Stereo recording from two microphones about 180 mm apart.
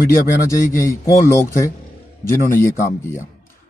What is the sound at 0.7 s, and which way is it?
Speech, 15° left (ahead or behind).